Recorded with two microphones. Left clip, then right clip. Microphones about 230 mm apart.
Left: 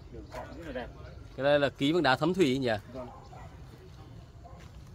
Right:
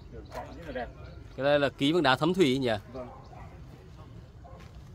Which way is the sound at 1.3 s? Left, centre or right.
Centre.